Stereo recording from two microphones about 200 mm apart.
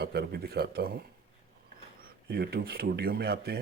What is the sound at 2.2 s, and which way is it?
Speech, 50° right (ahead or behind).